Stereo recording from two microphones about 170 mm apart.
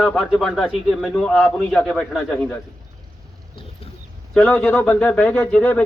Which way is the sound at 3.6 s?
35° left (ahead or behind).